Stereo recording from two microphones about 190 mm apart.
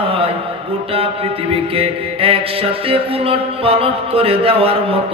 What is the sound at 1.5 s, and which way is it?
Mantra, 30° right (ahead or behind).